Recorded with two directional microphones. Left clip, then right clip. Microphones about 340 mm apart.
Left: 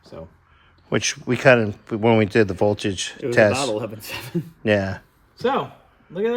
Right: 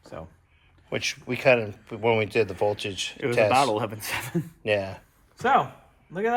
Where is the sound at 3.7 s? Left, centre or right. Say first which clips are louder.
Even; centre.